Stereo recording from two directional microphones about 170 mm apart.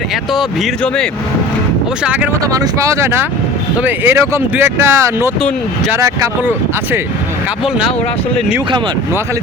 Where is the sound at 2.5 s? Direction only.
20° right (ahead or behind).